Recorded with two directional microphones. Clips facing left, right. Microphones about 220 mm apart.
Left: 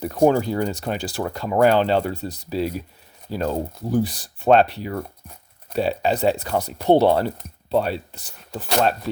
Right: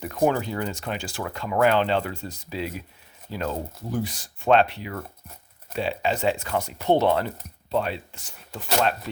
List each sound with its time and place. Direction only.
0.0 s speech: 35° left (ahead or behind)